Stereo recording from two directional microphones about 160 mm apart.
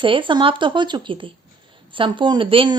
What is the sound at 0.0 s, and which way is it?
Speech, 30° right (ahead or behind).